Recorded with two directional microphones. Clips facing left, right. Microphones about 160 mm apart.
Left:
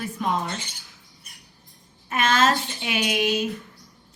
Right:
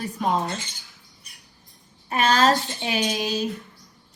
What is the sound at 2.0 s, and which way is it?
A woman's voice, 35° right (ahead or behind).